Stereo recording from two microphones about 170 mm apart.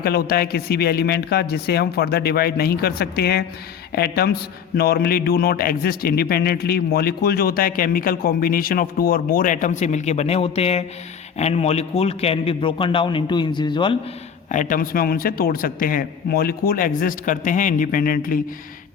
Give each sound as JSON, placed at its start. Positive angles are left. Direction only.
{"t": 0.0, "sound": "a man's voice", "side_deg": 65}
{"t": 14.5, "sound": "a man's voice", "side_deg": 50}